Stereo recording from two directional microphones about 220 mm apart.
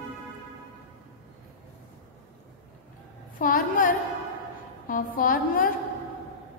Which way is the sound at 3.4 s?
40° left (ahead or behind).